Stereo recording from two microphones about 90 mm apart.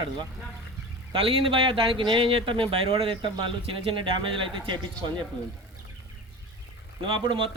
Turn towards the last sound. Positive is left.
turn(degrees=-65)  # may be behind; listen again after turning